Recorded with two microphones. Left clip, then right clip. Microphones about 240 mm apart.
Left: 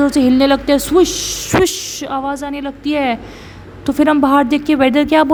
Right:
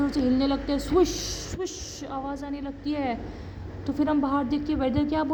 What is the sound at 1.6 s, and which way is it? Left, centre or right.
A woman's voice, left.